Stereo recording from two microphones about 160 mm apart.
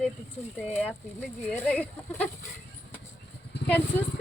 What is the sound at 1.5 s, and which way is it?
Speech, 10° left (ahead or behind).